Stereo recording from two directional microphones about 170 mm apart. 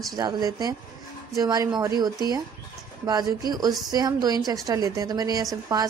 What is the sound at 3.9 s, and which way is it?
A woman's voice, 20° right (ahead or behind).